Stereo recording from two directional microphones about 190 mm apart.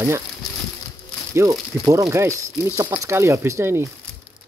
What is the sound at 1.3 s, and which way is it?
Speech, 15° right (ahead or behind).